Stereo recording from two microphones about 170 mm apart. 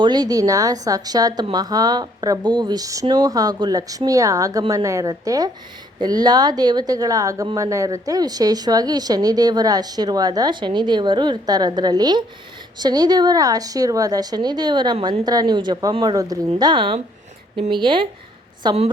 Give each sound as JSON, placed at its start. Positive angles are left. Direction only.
{"t": 0.0, "sound": "a woman's voice", "side_deg": -25}